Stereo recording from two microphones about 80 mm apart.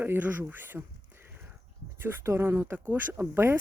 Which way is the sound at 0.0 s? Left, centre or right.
Right.